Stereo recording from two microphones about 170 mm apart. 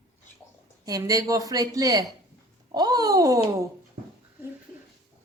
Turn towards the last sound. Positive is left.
turn(degrees=-20)  # may be behind; listen again after turning